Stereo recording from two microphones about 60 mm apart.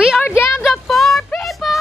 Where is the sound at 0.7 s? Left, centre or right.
Centre.